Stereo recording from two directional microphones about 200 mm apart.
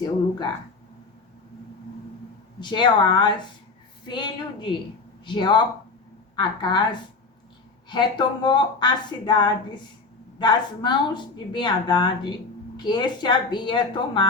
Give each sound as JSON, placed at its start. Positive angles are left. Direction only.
{"t": 2.6, "sound": "a woman's voice", "side_deg": 20}
{"t": 7.9, "sound": "a woman's voice", "side_deg": 20}